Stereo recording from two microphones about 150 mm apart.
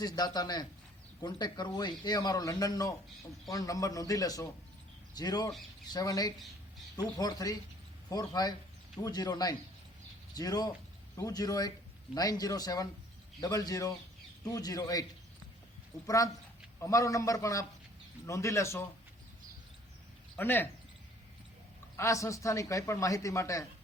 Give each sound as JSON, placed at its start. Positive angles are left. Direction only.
{"t": 0.0, "sound": "a man's voice", "side_deg": 25}
{"t": 16.0, "sound": "a man's voice", "side_deg": 25}
{"t": 20.3, "sound": "speech", "side_deg": 15}
{"t": 21.9, "sound": "a man's voice", "side_deg": 20}